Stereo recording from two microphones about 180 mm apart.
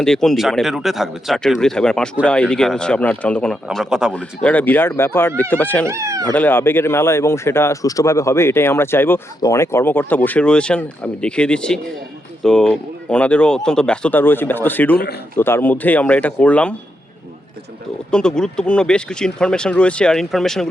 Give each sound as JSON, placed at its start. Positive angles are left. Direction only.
{"t": 0.0, "sound": "speech", "side_deg": 5}
{"t": 4.4, "sound": "speech", "side_deg": 10}
{"t": 5.8, "sound": "speech", "side_deg": -15}
{"t": 6.3, "sound": "speech", "side_deg": 10}
{"t": 14.9, "sound": "speech", "side_deg": 60}
{"t": 15.4, "sound": "speech", "side_deg": 10}
{"t": 18.1, "sound": "speech", "side_deg": 5}